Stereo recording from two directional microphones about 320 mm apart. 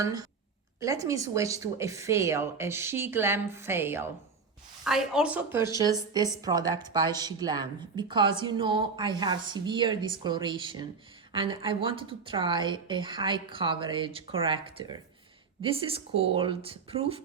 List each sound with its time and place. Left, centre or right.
0.0 s a woman's voice: centre